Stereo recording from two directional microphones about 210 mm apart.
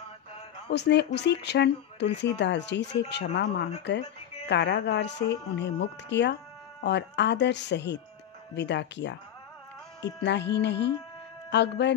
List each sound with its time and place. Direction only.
0.7 s speech: 55° left (ahead or behind)
10.2 s speech: 55° left (ahead or behind)